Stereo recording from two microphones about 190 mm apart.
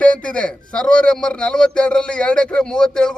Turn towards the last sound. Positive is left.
turn(degrees=5)  # may be behind; listen again after turning